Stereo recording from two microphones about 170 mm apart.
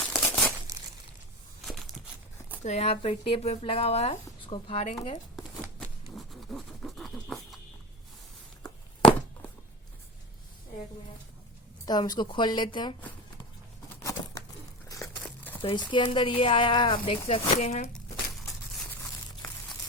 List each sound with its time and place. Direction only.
0.0 s crumpling: 5° left (ahead or behind)
2.6 s speech: 40° left (ahead or behind)
5.8 s pant: centre (ahead or behind)
11.9 s speech: 25° left (ahead or behind)
14.0 s bird: 20° left (ahead or behind)
15.6 s speech: 30° left (ahead or behind); by 17.9 s 45° left (ahead or behind)